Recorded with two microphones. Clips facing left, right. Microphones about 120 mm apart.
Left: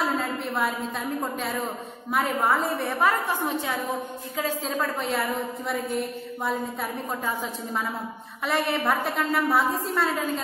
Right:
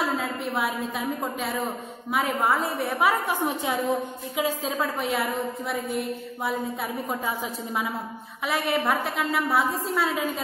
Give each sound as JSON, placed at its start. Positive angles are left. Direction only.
{"t": 0.0, "sound": "a woman's voice", "side_deg": 0}
{"t": 3.1, "sound": "a woman's voice", "side_deg": -15}